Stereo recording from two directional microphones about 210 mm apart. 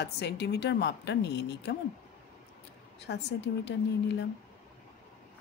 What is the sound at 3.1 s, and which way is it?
Speech, 55° left (ahead or behind).